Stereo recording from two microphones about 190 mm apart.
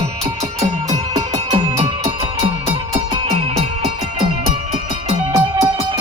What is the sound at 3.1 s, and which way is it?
Music, 30° right (ahead or behind).